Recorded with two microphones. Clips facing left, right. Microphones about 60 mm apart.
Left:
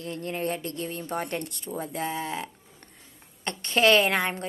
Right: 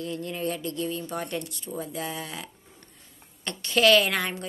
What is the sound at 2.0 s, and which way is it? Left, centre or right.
A woman's voice, left.